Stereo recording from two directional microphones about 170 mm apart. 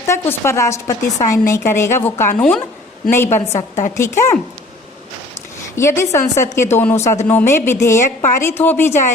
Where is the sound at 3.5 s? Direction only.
45° left (ahead or behind).